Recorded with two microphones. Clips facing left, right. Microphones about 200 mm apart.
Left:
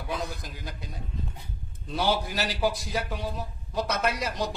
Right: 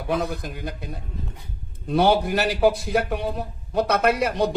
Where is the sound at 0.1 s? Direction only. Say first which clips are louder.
Right 9 dB; 60° right (ahead or behind).